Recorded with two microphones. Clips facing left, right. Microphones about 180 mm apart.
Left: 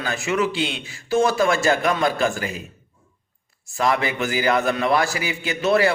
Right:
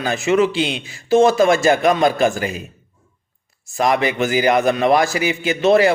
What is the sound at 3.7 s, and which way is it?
A man's voice, 20° right (ahead or behind).